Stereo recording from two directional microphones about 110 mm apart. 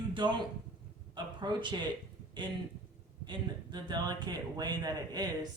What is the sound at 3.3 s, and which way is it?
A man's voice, 40° right (ahead or behind).